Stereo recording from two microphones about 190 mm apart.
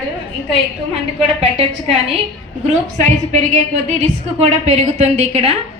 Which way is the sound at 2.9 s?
40° right (ahead or behind).